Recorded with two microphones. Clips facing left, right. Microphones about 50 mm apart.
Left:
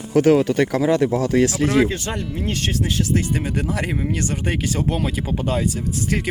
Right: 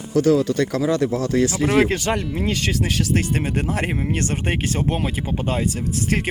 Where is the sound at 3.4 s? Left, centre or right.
Right.